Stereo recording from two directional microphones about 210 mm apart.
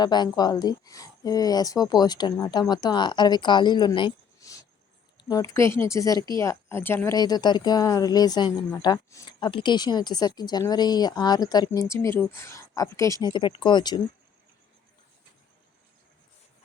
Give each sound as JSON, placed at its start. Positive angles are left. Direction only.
{"t": 0.0, "sound": "speech", "side_deg": 20}